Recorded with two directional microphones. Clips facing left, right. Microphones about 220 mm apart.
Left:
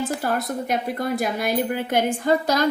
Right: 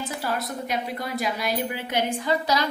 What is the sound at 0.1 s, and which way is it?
A woman's voice, 50° left (ahead or behind).